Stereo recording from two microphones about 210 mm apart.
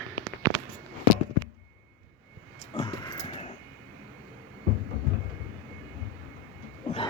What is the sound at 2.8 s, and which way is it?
Dog, 20° left (ahead or behind).